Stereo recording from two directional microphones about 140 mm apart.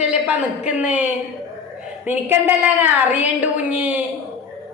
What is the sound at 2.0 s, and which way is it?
A man's voice, 15° right (ahead or behind).